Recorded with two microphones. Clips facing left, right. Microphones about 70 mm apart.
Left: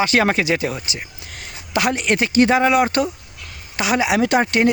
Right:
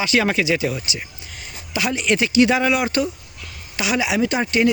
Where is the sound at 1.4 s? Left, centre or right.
Left.